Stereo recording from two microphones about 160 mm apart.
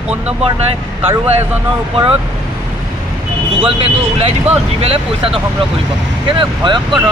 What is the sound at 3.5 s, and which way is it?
Speech, 35° right (ahead or behind).